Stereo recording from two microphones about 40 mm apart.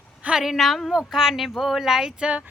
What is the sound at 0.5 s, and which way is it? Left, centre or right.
Speech, centre.